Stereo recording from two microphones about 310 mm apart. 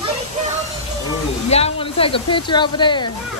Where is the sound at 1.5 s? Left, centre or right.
Centre.